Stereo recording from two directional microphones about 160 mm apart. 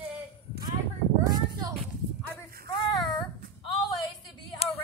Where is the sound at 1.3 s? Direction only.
25° right (ahead or behind).